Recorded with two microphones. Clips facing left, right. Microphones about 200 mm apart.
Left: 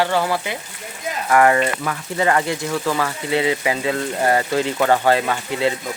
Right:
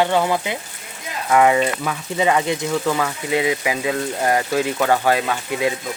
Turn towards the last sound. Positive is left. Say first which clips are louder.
# left 1 dB
turn(degrees=-15)  # may be behind; listen again after turning